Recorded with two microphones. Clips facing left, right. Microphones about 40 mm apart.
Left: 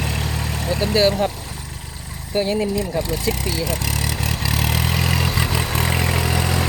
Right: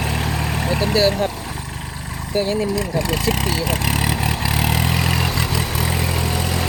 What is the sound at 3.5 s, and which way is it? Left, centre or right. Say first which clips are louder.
Speech: right 3 dB; right.